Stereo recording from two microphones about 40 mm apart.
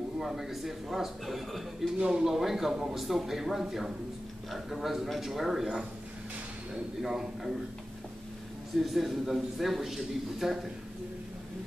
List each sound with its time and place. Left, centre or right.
0.2 s speech: centre
2.0 s speech: centre
2.2 s speech: centre
7.0 s speech: centre
8.8 s speech: centre